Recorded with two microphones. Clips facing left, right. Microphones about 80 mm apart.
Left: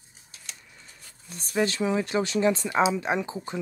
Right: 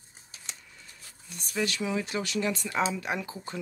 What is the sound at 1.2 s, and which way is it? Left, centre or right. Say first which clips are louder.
Speech: left 5 dB; left.